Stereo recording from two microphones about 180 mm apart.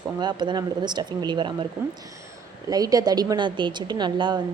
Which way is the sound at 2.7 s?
20° right (ahead or behind).